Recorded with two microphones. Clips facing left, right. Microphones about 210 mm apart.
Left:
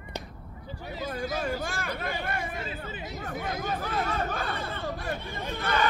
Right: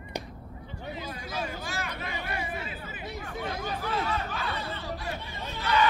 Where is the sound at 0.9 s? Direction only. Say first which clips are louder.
Left 9 dB; 50° left (ahead or behind).